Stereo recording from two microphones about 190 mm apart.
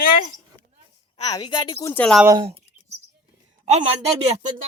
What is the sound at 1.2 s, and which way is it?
Speech, 20° left (ahead or behind).